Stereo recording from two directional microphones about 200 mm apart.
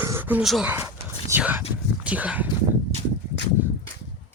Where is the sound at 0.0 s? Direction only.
10° right (ahead or behind).